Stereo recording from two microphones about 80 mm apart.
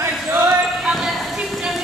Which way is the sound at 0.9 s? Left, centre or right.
Centre.